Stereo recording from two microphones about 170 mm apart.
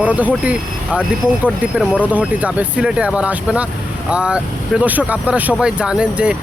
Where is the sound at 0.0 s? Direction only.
10° right (ahead or behind).